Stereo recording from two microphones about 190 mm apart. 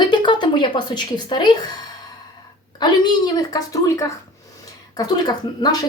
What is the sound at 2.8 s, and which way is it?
Speech, 25° left (ahead or behind).